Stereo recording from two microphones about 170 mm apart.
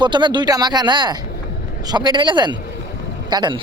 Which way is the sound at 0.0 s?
25° right (ahead or behind).